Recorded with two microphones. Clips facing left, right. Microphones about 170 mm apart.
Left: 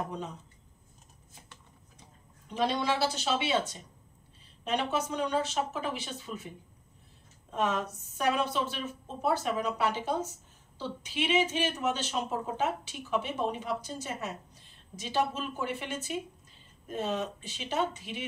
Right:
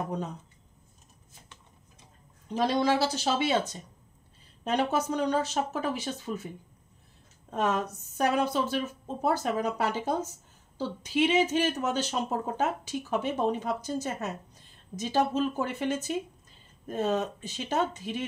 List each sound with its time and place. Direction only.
2.5 s speech: 40° right (ahead or behind)
4.6 s speech: 40° right (ahead or behind)
7.6 s speech: 40° right (ahead or behind)